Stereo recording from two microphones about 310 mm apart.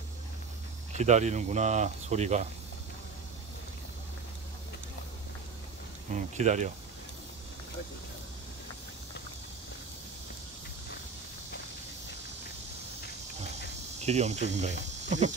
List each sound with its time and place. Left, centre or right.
0.9 s speech: right
6.1 s speech: right
14.0 s speech: right